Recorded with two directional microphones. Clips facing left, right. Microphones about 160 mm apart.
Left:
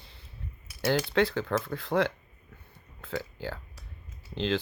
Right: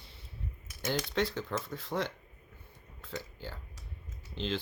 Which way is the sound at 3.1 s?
90° left.